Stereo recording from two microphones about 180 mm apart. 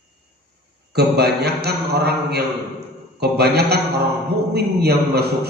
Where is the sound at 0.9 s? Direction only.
60° right (ahead or behind).